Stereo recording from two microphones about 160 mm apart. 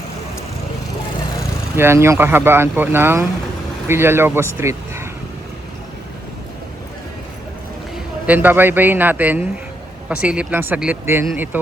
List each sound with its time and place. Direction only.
1.7 s speech: 15° right (ahead or behind)
4.5 s a sound: 15° right (ahead or behind)
7.9 s a man's voice: 10° right (ahead or behind)